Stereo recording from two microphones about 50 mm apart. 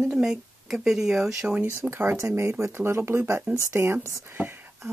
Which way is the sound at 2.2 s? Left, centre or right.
Right.